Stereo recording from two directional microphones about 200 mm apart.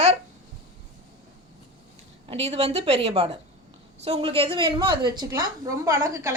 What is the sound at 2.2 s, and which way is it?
A woman's voice, 30° right (ahead or behind).